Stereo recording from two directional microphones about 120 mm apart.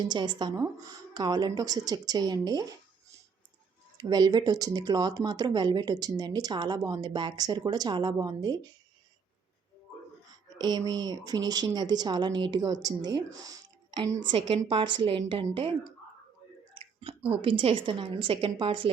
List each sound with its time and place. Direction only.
0.1 s speech: 40° right (ahead or behind)
3.9 s speech: 35° right (ahead or behind)
10.6 s speech: 35° right (ahead or behind)
14.3 s speech: 45° right (ahead or behind)
16.7 s speech: 50° right (ahead or behind)